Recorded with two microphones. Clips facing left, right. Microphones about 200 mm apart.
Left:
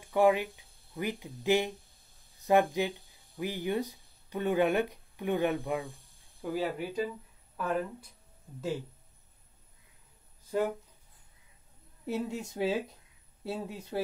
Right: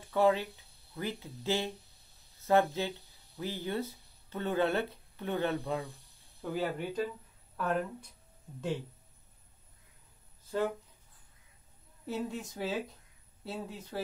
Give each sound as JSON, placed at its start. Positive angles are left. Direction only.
{"t": 0.0, "sound": "speech", "side_deg": 15}
{"t": 6.4, "sound": "speech", "side_deg": 5}
{"t": 10.5, "sound": "speech", "side_deg": 10}
{"t": 12.1, "sound": "a woman's voice", "side_deg": 25}
{"t": 13.5, "sound": "speech", "side_deg": 15}